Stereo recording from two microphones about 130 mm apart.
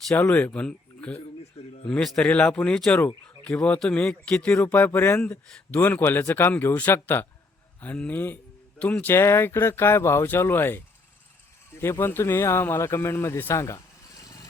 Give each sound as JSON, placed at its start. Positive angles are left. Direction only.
{"t": 0.1, "sound": "a man's voice", "side_deg": 10}